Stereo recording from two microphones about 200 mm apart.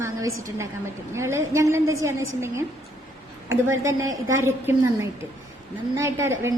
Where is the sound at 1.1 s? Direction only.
15° right (ahead or behind).